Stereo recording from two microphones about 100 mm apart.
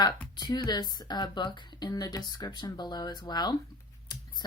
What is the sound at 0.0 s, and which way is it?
Speech, 45° left (ahead or behind).